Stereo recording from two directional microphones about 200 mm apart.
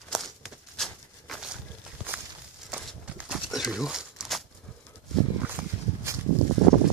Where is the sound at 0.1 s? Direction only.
Centre (ahead or behind).